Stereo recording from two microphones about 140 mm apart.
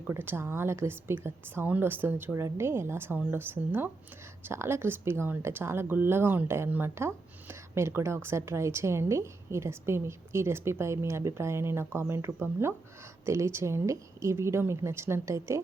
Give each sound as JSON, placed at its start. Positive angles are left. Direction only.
{"t": 0.1, "sound": "speech", "side_deg": -15}